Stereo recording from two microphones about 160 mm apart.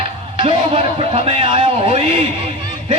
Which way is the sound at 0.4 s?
40° right (ahead or behind).